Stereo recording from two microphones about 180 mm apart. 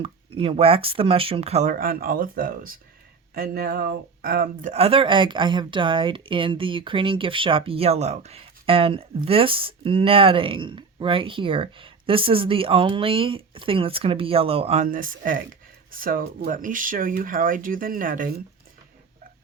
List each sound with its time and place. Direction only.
0.0 s speech: 30° right (ahead or behind)
1.7 s speech: 55° right (ahead or behind)
4.7 s speech: 30° right (ahead or behind)
14.8 s speech: 50° right (ahead or behind)